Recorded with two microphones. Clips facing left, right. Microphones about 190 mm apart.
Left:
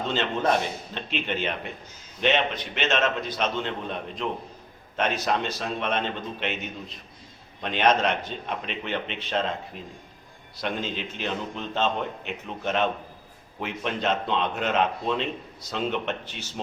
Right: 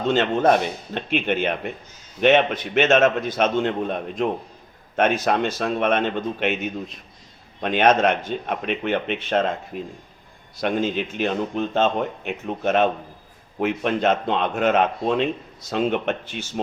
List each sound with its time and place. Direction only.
0.1 s a man's voice: 50° right (ahead or behind)
7.6 s a man's voice: 50° right (ahead or behind)
9.7 s speech: 10° right (ahead or behind)
10.6 s a man's voice: 50° right (ahead or behind)